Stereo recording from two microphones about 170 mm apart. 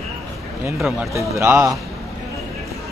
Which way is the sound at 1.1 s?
15° right (ahead or behind).